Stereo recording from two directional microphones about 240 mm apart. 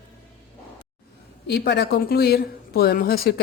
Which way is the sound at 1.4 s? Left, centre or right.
Left.